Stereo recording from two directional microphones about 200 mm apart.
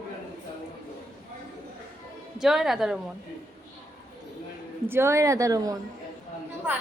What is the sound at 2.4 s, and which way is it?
Speech, centre (ahead or behind).